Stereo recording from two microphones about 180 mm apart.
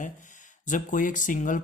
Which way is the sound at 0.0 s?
45° left (ahead or behind).